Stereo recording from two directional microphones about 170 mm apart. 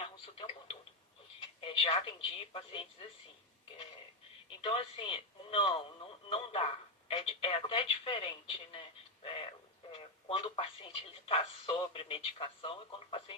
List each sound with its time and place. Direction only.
0.0 s radio: 35° left (ahead or behind)
1.6 s speech: 30° left (ahead or behind)
4.6 s speech: 30° left (ahead or behind)
9.9 s telephone: 35° left (ahead or behind)
11.3 s speech: 35° left (ahead or behind)